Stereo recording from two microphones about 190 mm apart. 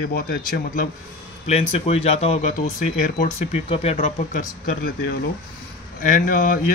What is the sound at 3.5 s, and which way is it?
Speech, 30° left (ahead or behind).